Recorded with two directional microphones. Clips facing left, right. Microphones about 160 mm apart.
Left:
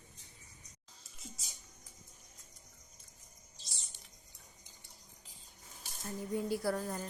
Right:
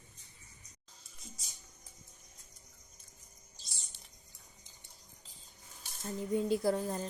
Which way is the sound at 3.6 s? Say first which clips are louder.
Left 1 dB; centre (ahead or behind).